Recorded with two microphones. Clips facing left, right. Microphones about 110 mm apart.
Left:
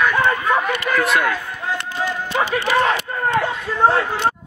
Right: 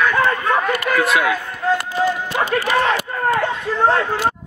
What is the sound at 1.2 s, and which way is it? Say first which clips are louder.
Chop: right 4 dB; 10° right (ahead or behind).